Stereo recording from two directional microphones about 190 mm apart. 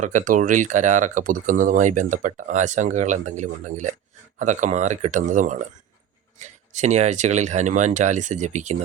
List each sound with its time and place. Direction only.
0.0 s speech: 40° right (ahead or behind)